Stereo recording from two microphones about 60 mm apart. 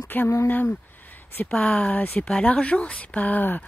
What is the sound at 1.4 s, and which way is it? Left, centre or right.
Speech, centre.